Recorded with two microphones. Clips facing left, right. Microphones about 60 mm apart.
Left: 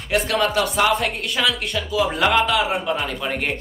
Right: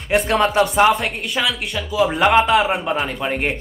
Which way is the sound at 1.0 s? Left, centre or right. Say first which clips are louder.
Even; centre.